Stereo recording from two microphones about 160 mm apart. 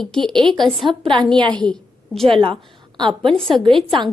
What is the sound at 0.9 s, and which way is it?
Speech, 30° right (ahead or behind).